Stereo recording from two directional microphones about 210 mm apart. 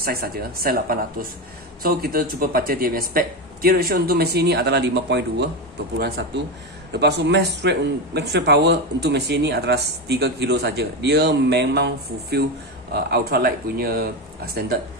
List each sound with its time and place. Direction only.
0.0 s speech: 45° right (ahead or behind)
6.9 s speech: 50° right (ahead or behind)